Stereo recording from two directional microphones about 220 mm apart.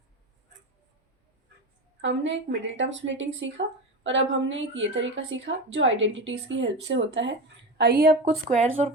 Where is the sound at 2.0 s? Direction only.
55° right (ahead or behind).